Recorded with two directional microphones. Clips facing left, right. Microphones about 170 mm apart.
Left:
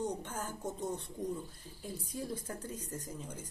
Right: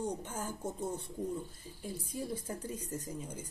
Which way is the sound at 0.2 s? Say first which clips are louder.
Right 1 dB; 10° right (ahead or behind).